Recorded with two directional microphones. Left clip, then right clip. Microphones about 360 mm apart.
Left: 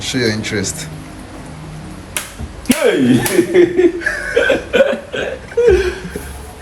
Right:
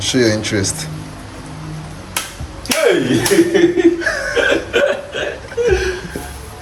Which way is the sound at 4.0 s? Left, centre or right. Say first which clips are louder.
Right 1 dB; centre.